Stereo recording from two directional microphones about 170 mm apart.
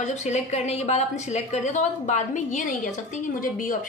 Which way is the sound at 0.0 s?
45° left (ahead or behind).